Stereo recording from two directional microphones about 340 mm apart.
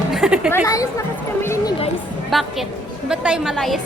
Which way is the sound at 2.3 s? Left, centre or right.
Centre.